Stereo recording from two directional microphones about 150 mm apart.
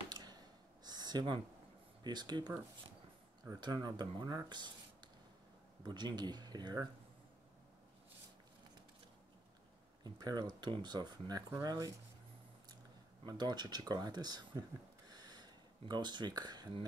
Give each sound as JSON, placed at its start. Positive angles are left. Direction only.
{"t": 0.1, "sound": "gasp", "side_deg": -25}
{"t": 0.8, "sound": "a sound", "side_deg": -30}
{"t": 2.0, "sound": "speech", "side_deg": -30}
{"t": 3.6, "sound": "speech", "side_deg": -30}
{"t": 5.9, "sound": "speech", "side_deg": -30}
{"t": 10.0, "sound": "speech", "side_deg": -25}
{"t": 13.2, "sound": "speech", "side_deg": -30}
{"t": 15.0, "sound": "a sound", "side_deg": -25}